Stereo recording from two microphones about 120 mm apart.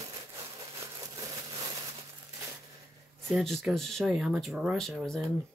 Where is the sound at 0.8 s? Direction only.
35° right (ahead or behind).